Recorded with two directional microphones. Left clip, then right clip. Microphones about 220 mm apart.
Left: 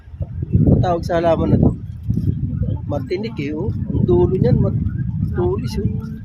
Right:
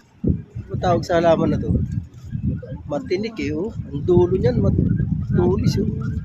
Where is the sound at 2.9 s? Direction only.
Centre (ahead or behind).